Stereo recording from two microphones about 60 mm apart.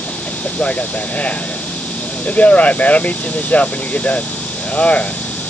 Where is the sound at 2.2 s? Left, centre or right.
Left.